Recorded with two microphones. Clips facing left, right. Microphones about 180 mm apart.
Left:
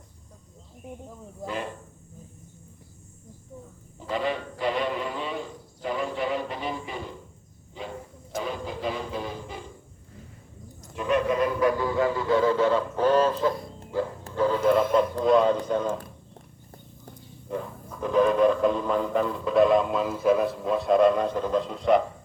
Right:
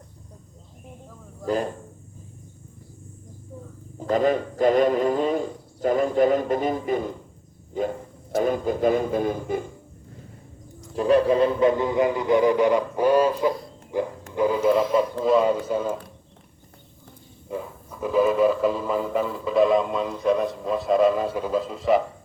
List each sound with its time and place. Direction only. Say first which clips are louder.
1.5 s a man's voice: right 8 dB; 40° right (ahead or behind)
4.1 s speech: right 7 dB; 45° right (ahead or behind)
10.9 s speech: right 6 dB; 35° right (ahead or behind); by 16.0 s 5° right (ahead or behind)
17.5 s speech: even; 5° right (ahead or behind)